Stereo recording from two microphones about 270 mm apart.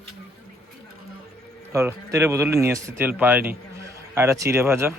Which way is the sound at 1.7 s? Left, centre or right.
Centre.